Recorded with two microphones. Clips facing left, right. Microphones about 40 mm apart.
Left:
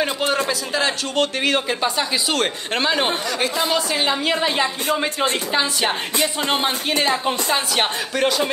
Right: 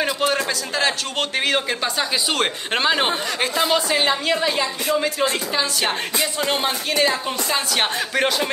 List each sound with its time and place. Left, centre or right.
0.5 s speech: centre
2.3 s speech: centre
4.0 s speech: centre
4.4 s music: left
7.0 s a woman's voice: centre
8.1 s speech: centre